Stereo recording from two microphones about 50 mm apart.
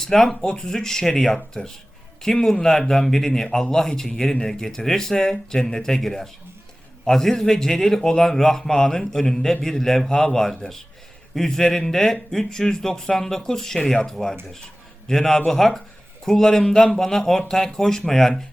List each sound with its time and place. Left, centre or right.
0.0 s speech: centre